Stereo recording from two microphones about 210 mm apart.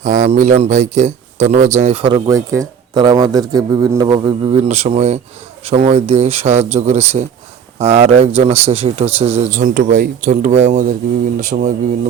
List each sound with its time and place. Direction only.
0.0 s speech: 35° right (ahead or behind); by 4.5 s 20° right (ahead or behind)
4.5 s speech: 30° right (ahead or behind)